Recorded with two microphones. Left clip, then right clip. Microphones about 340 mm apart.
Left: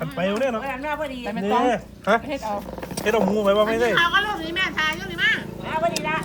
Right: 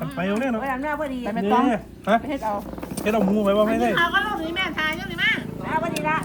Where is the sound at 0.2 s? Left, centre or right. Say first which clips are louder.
Left 3 dB; left.